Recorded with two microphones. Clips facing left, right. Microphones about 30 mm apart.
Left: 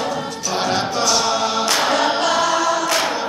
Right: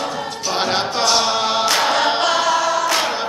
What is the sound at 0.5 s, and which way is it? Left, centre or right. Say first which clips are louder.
A capella: even; right.